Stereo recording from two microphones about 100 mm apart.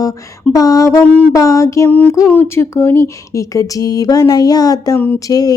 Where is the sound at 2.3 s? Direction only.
25° left (ahead or behind); by 4.9 s 40° left (ahead or behind).